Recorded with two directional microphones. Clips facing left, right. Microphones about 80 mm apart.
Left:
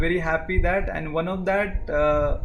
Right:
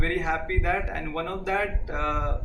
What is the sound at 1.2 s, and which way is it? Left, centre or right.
A man's voice, left.